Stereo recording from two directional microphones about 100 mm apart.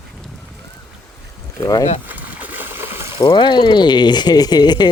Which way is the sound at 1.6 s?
40° left (ahead or behind).